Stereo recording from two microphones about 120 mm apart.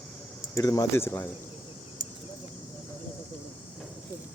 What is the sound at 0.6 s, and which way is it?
Speech, 30° left (ahead or behind).